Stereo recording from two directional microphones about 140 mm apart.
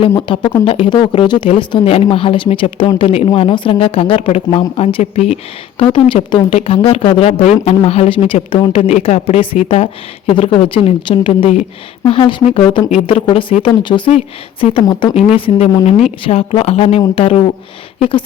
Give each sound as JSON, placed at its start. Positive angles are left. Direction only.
{"t": 0.2, "sound": "a woman's voice", "side_deg": 35}
{"t": 5.8, "sound": "a woman's voice", "side_deg": 35}